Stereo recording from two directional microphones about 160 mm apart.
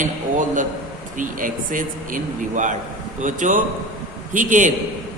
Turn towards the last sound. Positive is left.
turn(degrees=-55)  # may be behind; listen again after turning